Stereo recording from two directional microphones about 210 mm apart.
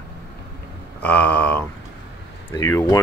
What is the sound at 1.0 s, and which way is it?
Speech, 5° left (ahead or behind).